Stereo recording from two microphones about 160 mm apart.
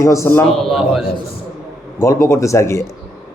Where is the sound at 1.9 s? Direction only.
20° left (ahead or behind).